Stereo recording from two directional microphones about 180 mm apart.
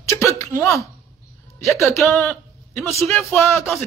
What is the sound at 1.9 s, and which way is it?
Speech, 15° left (ahead or behind).